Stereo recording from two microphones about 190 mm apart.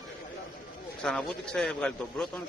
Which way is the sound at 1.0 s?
5° left (ahead or behind).